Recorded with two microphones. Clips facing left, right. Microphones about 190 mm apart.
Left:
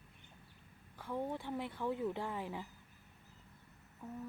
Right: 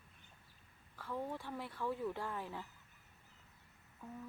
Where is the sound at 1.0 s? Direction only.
20° left (ahead or behind).